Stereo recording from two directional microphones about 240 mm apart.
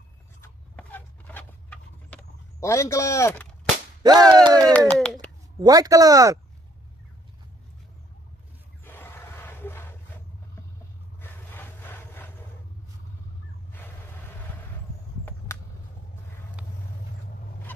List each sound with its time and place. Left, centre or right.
0.4 s a sound: centre
4.0 s speech: centre
4.7 s speech: centre
5.6 s speech: centre
8.8 s a sound: centre
11.1 s vehicle: centre
16.6 s vehicle: centre